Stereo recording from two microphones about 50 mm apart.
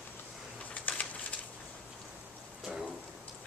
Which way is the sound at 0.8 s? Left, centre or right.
Left.